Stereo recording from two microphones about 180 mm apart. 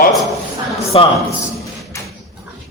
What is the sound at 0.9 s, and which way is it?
Speech, 30° left (ahead or behind).